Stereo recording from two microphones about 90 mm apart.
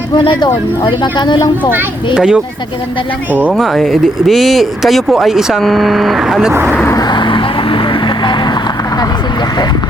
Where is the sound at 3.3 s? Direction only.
20° right (ahead or behind).